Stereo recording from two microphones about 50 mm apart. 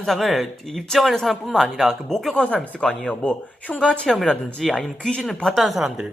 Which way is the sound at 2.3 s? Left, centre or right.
Left.